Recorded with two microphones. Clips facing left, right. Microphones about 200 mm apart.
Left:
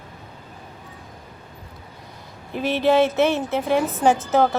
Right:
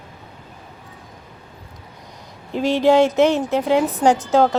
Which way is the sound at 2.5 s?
15° right (ahead or behind).